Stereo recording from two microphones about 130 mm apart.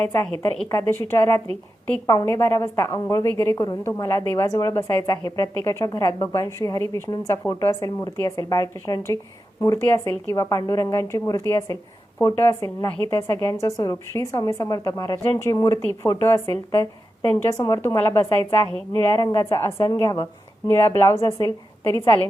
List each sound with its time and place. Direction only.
0.7 s a woman's voice: 20° left (ahead or behind)
6.3 s a woman's voice: 25° left (ahead or behind)
17.8 s a woman's voice: 20° left (ahead or behind)
20.7 s a woman's voice: 20° left (ahead or behind)